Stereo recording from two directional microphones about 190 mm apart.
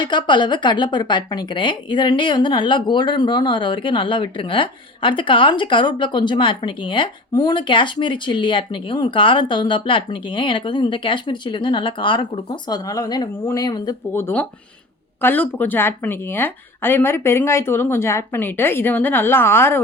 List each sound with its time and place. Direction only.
0.0 s a woman's voice: 25° left (ahead or behind)